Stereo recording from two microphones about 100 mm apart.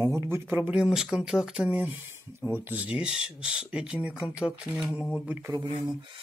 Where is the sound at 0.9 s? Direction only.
5° right (ahead or behind).